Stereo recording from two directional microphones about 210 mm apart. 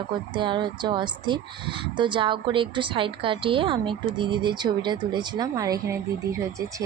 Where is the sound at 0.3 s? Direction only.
20° right (ahead or behind).